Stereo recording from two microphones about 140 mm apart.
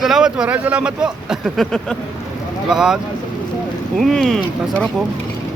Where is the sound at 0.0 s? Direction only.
5° right (ahead or behind).